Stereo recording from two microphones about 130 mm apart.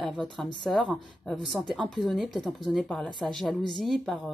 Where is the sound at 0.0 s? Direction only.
Centre (ahead or behind).